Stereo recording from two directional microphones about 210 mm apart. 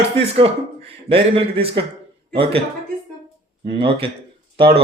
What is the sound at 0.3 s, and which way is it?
Speech, 25° right (ahead or behind).